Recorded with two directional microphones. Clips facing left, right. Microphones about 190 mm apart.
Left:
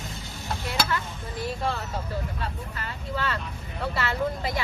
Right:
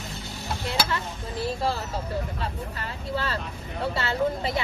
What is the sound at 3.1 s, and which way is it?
Speech, 35° right (ahead or behind).